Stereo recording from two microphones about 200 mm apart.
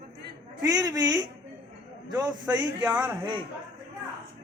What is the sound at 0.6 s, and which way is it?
A man's voice, 20° right (ahead or behind).